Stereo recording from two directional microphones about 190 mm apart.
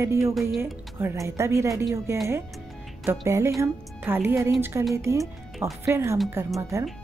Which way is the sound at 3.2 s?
15° right (ahead or behind).